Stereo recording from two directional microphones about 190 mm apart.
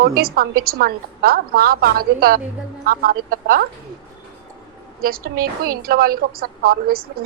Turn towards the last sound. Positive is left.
turn(degrees=-50)  # may be behind; listen again after turning